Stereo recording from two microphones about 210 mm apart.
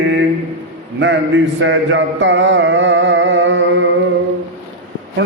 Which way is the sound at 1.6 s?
60° right (ahead or behind).